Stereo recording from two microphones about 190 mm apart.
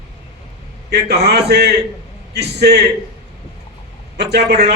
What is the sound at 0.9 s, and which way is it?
A man's voice, 60° right (ahead or behind).